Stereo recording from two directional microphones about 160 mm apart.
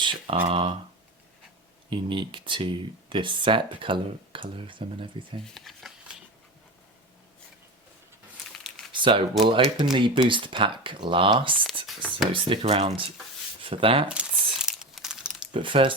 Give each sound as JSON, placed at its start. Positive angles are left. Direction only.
{"t": 0.0, "sound": "speech", "side_deg": -30}
{"t": 1.9, "sound": "speech", "side_deg": -30}
{"t": 5.5, "sound": "a sound", "side_deg": 0}
{"t": 8.9, "sound": "a sound", "side_deg": -30}
{"t": 9.4, "sound": "speech", "side_deg": -40}
{"t": 9.7, "sound": "speech", "side_deg": -25}
{"t": 11.9, "sound": "speech", "side_deg": 0}
{"t": 12.3, "sound": "speech", "side_deg": -35}
{"t": 14.6, "sound": "a sound", "side_deg": -5}
{"t": 15.5, "sound": "speech", "side_deg": -30}